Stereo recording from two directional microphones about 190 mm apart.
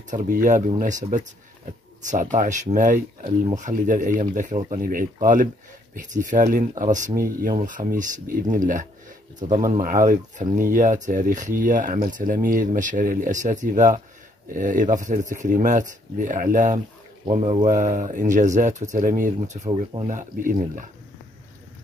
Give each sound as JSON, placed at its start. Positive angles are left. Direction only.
{"t": 0.1, "sound": "speech", "side_deg": -45}
{"t": 9.5, "sound": "speech", "side_deg": -25}
{"t": 9.8, "sound": "speech", "side_deg": -45}
{"t": 17.3, "sound": "speech", "side_deg": -30}
{"t": 17.6, "sound": "speech", "side_deg": -40}
{"t": 19.7, "sound": "speech", "side_deg": -25}
{"t": 20.1, "sound": "speech", "side_deg": -45}